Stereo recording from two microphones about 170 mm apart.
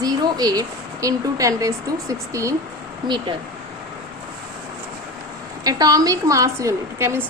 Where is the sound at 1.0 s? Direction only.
20° right (ahead or behind).